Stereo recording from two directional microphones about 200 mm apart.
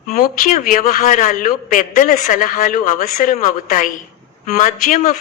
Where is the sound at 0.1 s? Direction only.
45° left (ahead or behind).